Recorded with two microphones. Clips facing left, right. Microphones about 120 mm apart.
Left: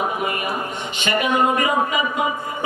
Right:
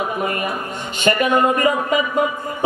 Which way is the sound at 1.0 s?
45° right (ahead or behind).